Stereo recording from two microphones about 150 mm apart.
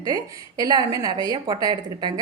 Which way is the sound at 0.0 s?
25° right (ahead or behind).